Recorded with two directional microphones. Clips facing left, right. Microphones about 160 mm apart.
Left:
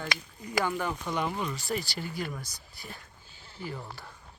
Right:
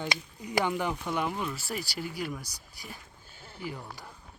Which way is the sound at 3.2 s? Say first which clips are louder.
Right 4 dB; 50° right (ahead or behind).